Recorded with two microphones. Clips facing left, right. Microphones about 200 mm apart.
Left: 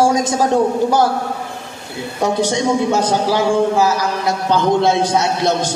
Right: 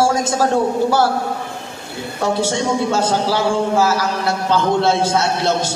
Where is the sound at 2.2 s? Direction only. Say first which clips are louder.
Left 2 dB; 15° left (ahead or behind).